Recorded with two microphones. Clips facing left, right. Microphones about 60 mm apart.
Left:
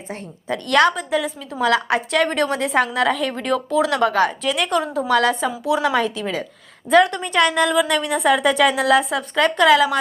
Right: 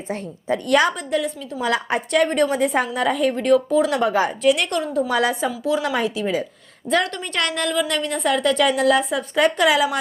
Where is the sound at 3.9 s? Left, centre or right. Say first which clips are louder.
Left 2 dB; left.